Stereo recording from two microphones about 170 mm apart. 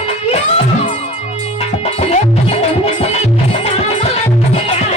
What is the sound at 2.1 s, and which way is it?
Music, 35° left (ahead or behind).